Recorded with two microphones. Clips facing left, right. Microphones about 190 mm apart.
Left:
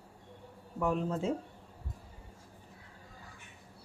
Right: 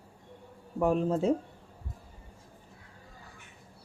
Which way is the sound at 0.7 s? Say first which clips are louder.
Right 5 dB; 35° right (ahead or behind).